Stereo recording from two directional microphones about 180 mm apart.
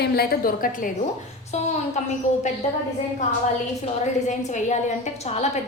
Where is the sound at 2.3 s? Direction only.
45° left (ahead or behind).